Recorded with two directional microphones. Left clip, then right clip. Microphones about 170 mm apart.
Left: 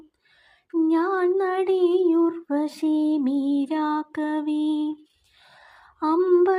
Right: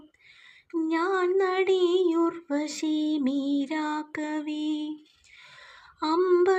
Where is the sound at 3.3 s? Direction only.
60° left (ahead or behind).